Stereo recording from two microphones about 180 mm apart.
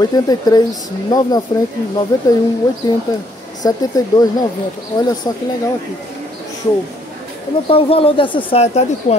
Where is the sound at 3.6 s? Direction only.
20° left (ahead or behind).